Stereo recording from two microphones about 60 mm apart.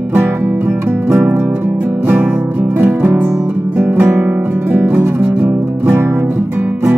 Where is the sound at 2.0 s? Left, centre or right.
Right.